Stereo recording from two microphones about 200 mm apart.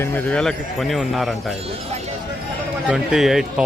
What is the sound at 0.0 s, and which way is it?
Speech, 10° left (ahead or behind).